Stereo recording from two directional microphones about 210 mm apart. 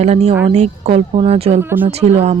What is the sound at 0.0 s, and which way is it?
Speech, 30° right (ahead or behind).